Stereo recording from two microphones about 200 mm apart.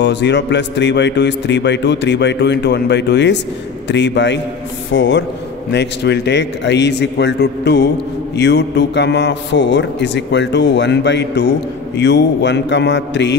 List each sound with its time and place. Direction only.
0.0 s a man's voice: 60° left (ahead or behind)